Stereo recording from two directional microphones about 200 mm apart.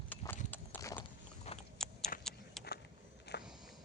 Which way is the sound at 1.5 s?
35° left (ahead or behind).